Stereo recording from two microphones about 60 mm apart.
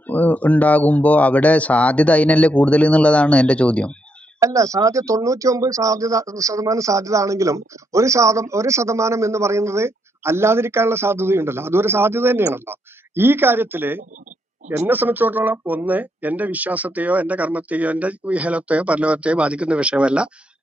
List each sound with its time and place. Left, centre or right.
0.0 s speech: left
4.4 s speech: right; by 20.2 s centre